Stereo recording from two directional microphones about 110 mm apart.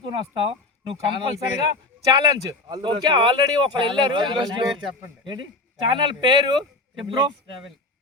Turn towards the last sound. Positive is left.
turn(degrees=-45)  # may be behind; listen again after turning